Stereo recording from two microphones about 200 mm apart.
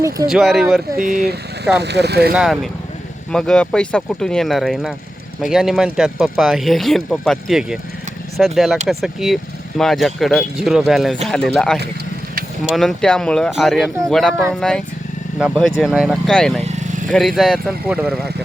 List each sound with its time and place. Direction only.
0.3 s speech: centre (ahead or behind)
0.9 s speech: 45° right (ahead or behind)
2.3 s speech: 5° right (ahead or behind)